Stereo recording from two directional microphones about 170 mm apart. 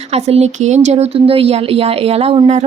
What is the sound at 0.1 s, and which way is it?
A woman's voice, 40° right (ahead or behind).